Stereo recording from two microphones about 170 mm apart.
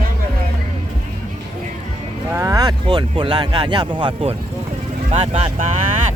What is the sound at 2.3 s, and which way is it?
Speech, 20° right (ahead or behind).